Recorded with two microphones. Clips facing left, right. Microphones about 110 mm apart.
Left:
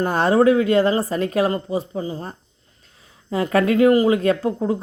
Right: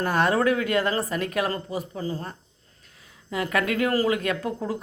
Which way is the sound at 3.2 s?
30° left (ahead or behind).